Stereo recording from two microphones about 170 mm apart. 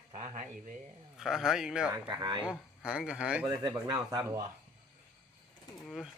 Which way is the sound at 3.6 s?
20° right (ahead or behind).